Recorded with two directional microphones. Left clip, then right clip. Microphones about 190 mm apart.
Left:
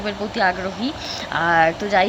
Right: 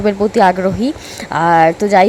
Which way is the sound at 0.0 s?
35° right (ahead or behind).